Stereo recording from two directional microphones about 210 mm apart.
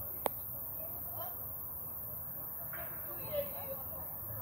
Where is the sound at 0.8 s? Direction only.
15° left (ahead or behind).